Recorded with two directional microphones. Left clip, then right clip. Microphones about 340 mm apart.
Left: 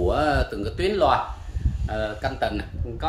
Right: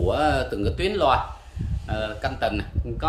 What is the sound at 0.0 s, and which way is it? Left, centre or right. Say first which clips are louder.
A man's voice: even; centre.